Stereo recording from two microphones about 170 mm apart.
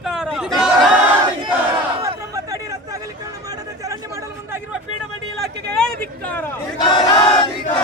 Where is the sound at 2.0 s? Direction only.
20° right (ahead or behind).